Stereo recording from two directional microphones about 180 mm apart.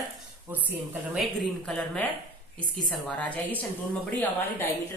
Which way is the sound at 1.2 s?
Centre (ahead or behind).